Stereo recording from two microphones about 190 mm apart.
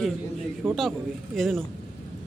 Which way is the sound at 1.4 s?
Centre (ahead or behind).